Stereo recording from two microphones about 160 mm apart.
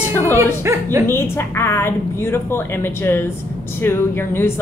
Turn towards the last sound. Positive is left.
turn(degrees=15)  # may be behind; listen again after turning